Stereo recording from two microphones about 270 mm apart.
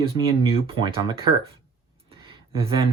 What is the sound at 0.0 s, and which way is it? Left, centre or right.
Speech, centre.